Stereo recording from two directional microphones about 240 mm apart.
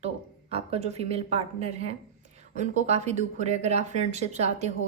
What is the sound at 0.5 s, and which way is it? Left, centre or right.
A woman's voice, right.